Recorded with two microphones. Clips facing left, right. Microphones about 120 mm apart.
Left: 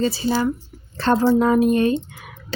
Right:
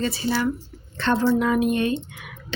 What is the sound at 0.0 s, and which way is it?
A woman's voice, 30° left (ahead or behind).